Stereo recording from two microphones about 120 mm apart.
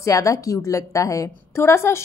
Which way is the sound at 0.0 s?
25° left (ahead or behind).